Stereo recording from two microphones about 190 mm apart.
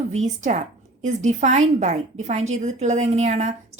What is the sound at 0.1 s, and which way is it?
Speech, 40° right (ahead or behind).